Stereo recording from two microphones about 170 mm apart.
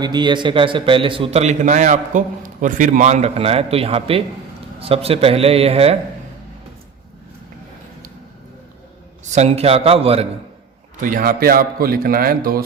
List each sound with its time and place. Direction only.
0.0 s a man's voice: 25° right (ahead or behind)
9.3 s a man's voice: 40° right (ahead or behind)
11.0 s a man's voice: 55° right (ahead or behind)